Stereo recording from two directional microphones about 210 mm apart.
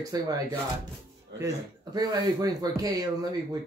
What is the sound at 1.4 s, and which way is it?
Speech, 15° right (ahead or behind).